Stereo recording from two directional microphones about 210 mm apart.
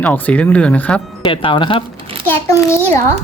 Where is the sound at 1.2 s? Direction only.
25° left (ahead or behind).